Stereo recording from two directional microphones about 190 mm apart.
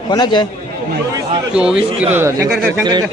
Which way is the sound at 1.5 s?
5° right (ahead or behind).